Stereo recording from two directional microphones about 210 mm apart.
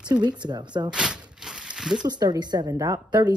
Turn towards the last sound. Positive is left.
turn(degrees=-20)  # may be behind; listen again after turning